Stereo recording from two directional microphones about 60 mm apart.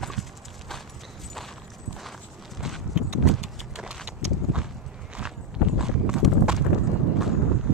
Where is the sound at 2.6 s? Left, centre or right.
Centre.